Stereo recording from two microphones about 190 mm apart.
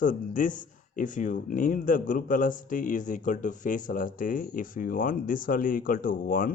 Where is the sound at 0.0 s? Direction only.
45° left (ahead or behind).